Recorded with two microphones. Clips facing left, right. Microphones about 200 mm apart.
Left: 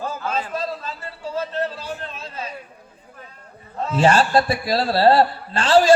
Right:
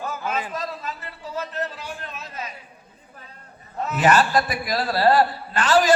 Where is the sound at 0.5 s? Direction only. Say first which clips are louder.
Left 3 dB; 30° left (ahead or behind).